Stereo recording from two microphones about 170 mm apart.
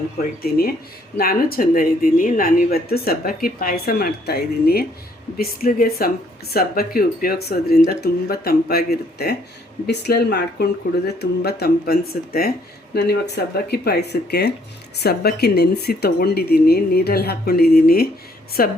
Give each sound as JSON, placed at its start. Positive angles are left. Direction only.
{"t": 1.1, "sound": "speech", "side_deg": 60}